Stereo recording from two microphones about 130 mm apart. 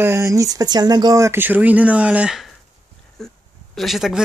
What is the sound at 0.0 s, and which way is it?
Speech, 20° right (ahead or behind).